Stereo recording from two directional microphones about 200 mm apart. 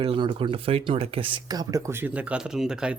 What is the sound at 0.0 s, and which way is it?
Speech, 30° right (ahead or behind).